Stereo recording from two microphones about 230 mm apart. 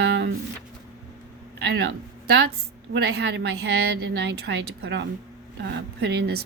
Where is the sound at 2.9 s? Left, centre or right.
Right.